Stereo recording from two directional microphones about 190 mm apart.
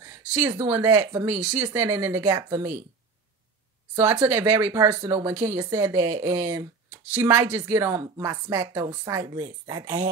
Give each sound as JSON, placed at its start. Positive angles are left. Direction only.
{"t": 0.0, "sound": "speech", "side_deg": -15}
{"t": 3.9, "sound": "speech", "side_deg": -15}